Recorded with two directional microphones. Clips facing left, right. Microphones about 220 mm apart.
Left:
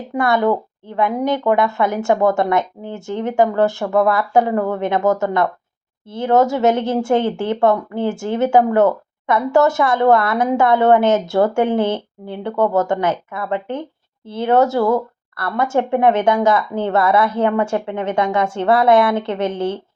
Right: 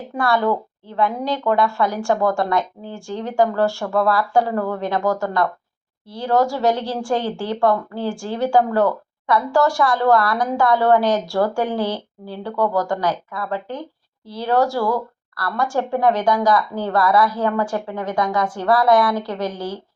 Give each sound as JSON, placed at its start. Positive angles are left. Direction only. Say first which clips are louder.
{"t": 0.1, "sound": "speech", "louder": "left 3 dB", "side_deg": 20}